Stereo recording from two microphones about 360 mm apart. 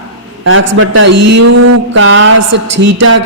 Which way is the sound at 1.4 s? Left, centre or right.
Right.